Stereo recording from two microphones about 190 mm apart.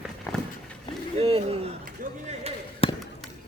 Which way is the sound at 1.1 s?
30° right (ahead or behind).